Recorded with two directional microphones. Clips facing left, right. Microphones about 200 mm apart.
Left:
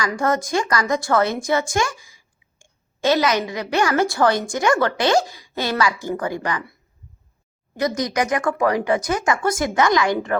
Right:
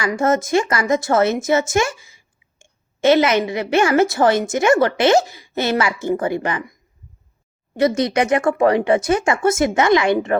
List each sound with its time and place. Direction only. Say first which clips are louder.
0.1 s a woman's voice: right 8 dB; 20° right (ahead or behind)
7.8 s a woman's voice: right 5 dB; 25° right (ahead or behind)